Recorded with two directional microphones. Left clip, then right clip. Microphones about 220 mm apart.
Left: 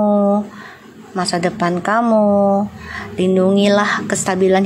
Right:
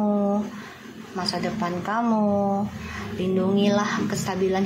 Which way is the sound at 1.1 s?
50° left (ahead or behind).